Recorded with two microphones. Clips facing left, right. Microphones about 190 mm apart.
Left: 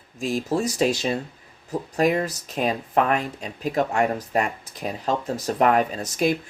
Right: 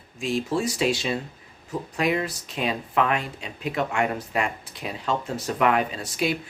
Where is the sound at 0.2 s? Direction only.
40° left (ahead or behind).